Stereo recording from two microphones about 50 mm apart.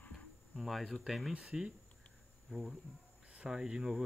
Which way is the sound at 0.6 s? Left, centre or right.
Centre.